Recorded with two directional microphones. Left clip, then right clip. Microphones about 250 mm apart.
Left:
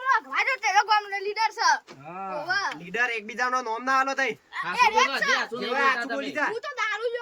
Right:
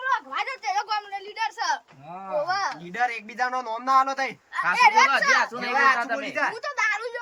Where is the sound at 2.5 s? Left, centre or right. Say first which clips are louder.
Right 1 dB; centre.